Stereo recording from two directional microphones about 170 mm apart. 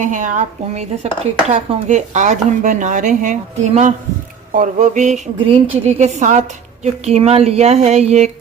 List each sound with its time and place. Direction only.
0.0 s speech: 50° right (ahead or behind)